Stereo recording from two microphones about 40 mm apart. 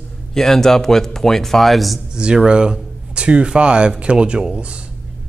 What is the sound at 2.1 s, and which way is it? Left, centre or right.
Speech, right.